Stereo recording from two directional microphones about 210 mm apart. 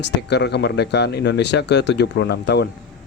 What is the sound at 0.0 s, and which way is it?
Speech, 55° left (ahead or behind).